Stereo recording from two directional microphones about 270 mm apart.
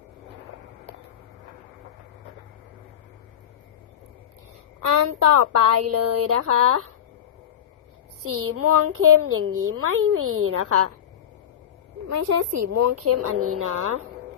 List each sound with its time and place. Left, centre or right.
4.8 s speech: right
8.2 s speech: right
12.0 s speech: right